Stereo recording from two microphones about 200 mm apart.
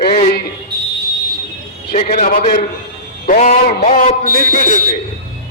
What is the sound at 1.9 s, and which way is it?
A man's voice, 40° left (ahead or behind).